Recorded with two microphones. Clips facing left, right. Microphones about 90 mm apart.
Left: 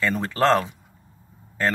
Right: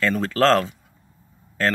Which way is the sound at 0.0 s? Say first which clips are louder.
Right 2 dB; 15° left (ahead or behind).